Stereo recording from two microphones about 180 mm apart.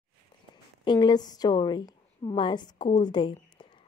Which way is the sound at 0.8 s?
25° left (ahead or behind).